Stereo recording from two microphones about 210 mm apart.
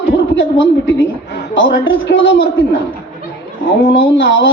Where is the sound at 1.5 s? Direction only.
65° left (ahead or behind).